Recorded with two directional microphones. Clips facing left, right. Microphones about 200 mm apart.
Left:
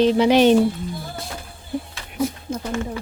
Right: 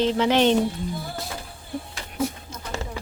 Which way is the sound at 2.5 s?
50° left (ahead or behind).